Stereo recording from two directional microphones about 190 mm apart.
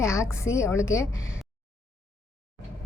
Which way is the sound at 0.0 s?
15° left (ahead or behind).